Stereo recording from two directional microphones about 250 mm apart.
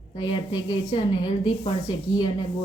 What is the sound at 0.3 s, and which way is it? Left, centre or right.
A woman's voice, centre.